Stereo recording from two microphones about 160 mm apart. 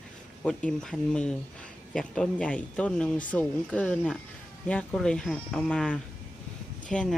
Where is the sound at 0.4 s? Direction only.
5° left (ahead or behind).